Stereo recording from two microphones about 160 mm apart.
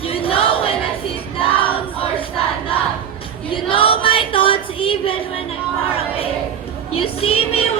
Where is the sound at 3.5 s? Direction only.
35° left (ahead or behind).